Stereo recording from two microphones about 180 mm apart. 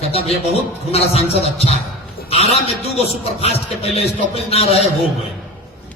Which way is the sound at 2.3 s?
35° left (ahead or behind).